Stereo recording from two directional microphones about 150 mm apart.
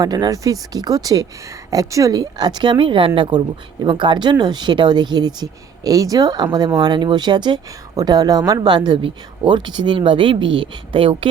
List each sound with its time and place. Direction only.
0.0 s speech: 25° right (ahead or behind)